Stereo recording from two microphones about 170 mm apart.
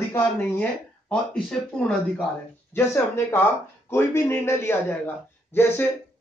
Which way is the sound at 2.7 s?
15° left (ahead or behind).